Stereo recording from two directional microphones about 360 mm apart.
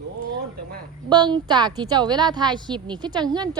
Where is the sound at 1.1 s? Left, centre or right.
Centre.